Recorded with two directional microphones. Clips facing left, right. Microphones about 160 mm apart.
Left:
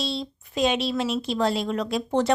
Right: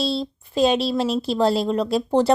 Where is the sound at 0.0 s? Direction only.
35° right (ahead or behind).